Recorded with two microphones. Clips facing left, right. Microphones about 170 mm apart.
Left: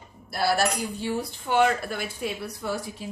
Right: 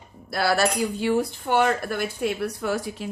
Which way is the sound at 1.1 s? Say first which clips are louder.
Left 1 dB; 50° right (ahead or behind).